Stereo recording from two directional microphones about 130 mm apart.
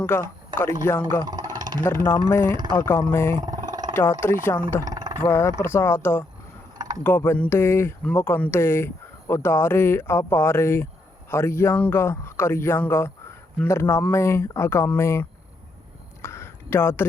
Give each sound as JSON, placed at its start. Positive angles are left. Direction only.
{"t": 0.0, "sound": "speech", "side_deg": 15}
{"t": 1.2, "sound": "speech", "side_deg": -30}
{"t": 1.5, "sound": "a sound", "side_deg": -35}
{"t": 1.8, "sound": "speech", "side_deg": 20}
{"t": 3.4, "sound": "vehicle", "side_deg": -30}
{"t": 3.9, "sound": "speech", "side_deg": 20}
{"t": 4.9, "sound": "vehicle", "side_deg": -30}
{"t": 5.2, "sound": "speech", "side_deg": 20}
{"t": 6.7, "sound": "mechanisms", "side_deg": -30}
{"t": 7.0, "sound": "speech", "side_deg": 20}
{"t": 16.2, "sound": "a sound", "side_deg": 20}